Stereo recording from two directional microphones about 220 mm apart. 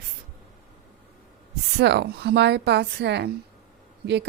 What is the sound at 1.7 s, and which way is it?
A woman's voice, 50° right (ahead or behind).